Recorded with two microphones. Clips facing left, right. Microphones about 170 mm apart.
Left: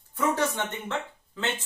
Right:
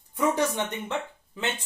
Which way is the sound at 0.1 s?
15° right (ahead or behind).